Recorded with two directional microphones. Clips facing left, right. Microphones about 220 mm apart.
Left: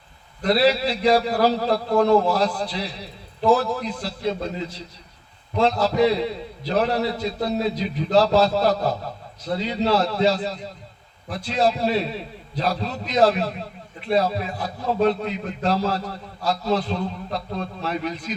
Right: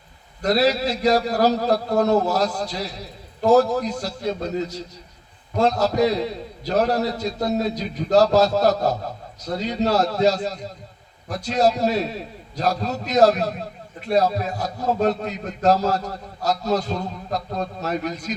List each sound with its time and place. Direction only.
0.4 s a man's voice: 45° right (ahead or behind)